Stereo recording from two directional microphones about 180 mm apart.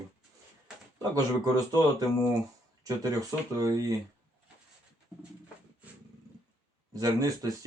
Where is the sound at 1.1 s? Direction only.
20° right (ahead or behind).